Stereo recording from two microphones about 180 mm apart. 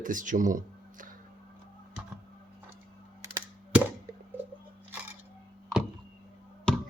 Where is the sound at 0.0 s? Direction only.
45° right (ahead or behind).